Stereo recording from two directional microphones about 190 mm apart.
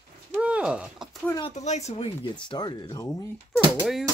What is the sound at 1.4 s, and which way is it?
Speech, 35° left (ahead or behind).